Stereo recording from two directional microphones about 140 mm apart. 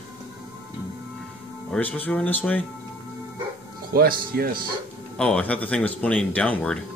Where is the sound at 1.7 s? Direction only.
10° left (ahead or behind).